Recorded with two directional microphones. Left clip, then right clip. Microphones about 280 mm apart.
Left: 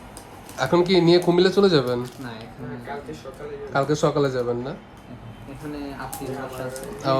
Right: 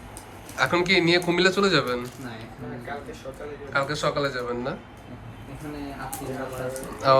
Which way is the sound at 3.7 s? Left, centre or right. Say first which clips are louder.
Left 4 dB; left.